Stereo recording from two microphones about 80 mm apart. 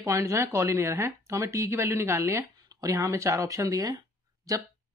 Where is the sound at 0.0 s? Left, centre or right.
Right.